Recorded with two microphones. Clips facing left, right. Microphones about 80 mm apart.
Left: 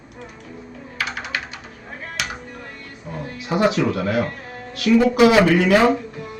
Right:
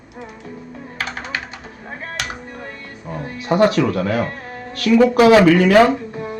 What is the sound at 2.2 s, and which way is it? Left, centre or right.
Music, right.